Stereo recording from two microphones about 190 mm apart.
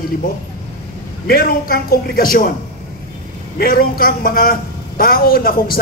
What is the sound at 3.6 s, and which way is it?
Speech, 50° left (ahead or behind).